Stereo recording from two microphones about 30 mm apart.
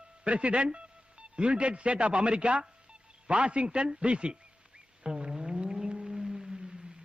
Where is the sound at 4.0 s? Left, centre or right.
Right.